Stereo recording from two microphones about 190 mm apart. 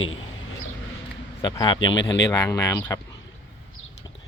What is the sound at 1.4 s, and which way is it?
Speech, 20° left (ahead or behind).